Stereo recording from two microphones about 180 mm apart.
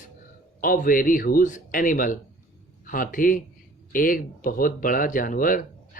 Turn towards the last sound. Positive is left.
turn(degrees=50)  # may be behind; listen again after turning